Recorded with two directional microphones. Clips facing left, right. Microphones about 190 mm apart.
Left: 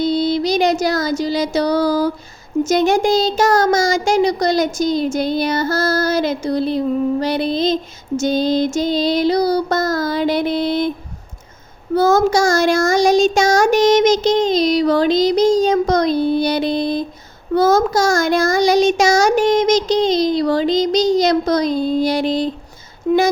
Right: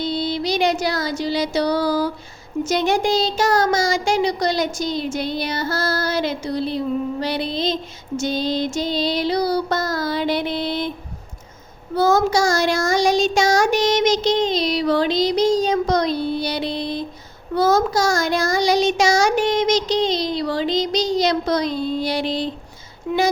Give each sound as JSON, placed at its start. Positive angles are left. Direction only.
{"t": 0.0, "sound": "a sound", "side_deg": 45}
{"t": 2.6, "sound": "speech", "side_deg": 45}
{"t": 11.9, "sound": "speech", "side_deg": 50}